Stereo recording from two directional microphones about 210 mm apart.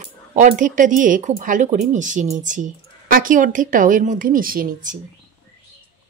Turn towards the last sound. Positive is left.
turn(degrees=-40)  # may be behind; listen again after turning